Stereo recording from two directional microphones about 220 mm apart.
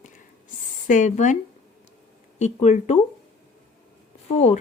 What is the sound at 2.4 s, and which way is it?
Speech, 30° left (ahead or behind).